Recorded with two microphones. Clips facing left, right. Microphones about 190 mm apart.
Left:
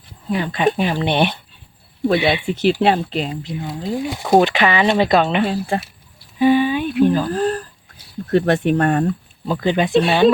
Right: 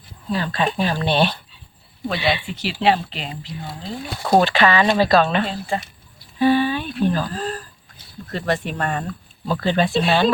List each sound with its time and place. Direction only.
0.3 s speech: 20° left (ahead or behind)
2.0 s speech: 50° left (ahead or behind)
3.6 s speech: 15° left (ahead or behind)
6.4 s a sound: 15° left (ahead or behind)
7.3 s speech: 55° left (ahead or behind)
9.5 s speech: 15° left (ahead or behind)